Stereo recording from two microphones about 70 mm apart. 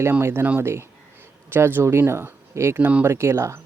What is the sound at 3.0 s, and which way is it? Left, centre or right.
Speech, right.